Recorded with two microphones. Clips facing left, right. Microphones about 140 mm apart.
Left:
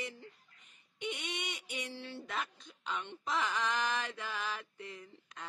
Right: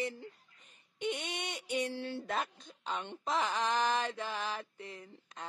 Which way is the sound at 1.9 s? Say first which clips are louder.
Right 6 dB; 50° right (ahead or behind).